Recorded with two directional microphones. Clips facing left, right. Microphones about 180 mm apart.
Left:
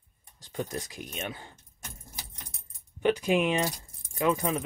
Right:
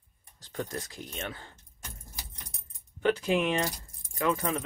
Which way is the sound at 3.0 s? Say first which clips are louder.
Left 1 dB; 15° left (ahead or behind).